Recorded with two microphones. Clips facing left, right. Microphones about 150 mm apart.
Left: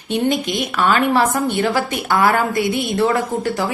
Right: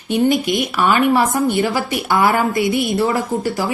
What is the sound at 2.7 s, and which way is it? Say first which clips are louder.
Speech: right 2 dB; 55° right (ahead or behind).